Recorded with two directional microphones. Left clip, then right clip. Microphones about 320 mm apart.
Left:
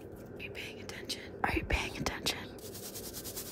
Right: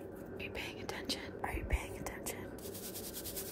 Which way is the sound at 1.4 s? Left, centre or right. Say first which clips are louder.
Left 11 dB; left.